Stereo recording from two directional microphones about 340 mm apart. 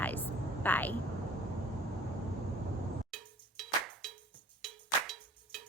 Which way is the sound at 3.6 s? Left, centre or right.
Centre.